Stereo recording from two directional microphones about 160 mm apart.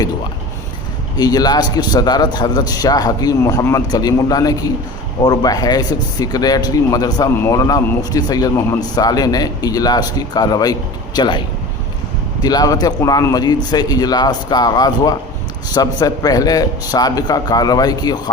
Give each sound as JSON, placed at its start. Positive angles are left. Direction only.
{"t": 1.1, "sound": "speech", "side_deg": 25}